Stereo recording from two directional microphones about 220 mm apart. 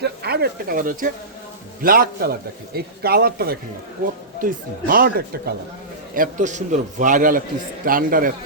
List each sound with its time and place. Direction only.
0.0 s a man's voice: 50° right (ahead or behind)